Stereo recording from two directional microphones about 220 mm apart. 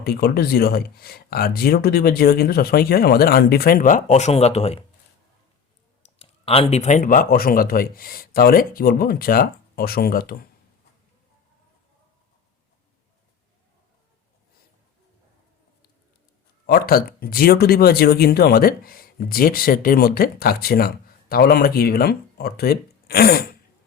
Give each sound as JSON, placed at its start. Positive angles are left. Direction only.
{"t": 0.0, "sound": "speech", "side_deg": 45}
{"t": 6.1, "sound": "speech", "side_deg": 25}
{"t": 16.6, "sound": "speech", "side_deg": 40}